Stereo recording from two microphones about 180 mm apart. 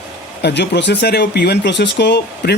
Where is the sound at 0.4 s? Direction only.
70° left (ahead or behind).